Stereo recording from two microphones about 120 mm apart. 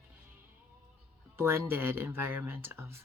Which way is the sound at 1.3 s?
20° right (ahead or behind).